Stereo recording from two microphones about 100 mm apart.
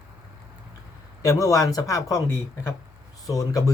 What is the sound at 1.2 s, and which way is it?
Speech, 35° left (ahead or behind).